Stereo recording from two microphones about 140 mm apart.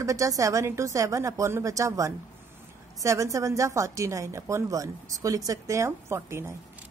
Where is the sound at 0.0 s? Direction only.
25° right (ahead or behind).